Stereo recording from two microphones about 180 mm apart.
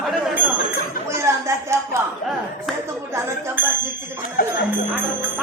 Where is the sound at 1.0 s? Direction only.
15° right (ahead or behind).